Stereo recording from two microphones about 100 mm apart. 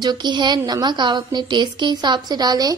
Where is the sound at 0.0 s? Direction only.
45° right (ahead or behind).